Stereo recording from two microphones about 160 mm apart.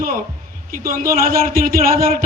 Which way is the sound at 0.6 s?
60° right (ahead or behind).